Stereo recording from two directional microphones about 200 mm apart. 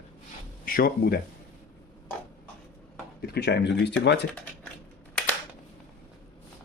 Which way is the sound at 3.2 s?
55° left (ahead or behind).